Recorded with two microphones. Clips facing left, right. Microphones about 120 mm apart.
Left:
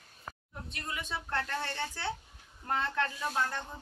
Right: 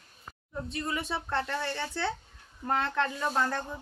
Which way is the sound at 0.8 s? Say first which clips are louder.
Right 4 dB; 75° right (ahead or behind).